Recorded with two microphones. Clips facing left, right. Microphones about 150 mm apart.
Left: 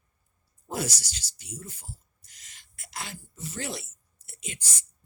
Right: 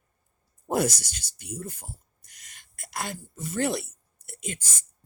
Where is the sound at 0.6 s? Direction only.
55° right (ahead or behind).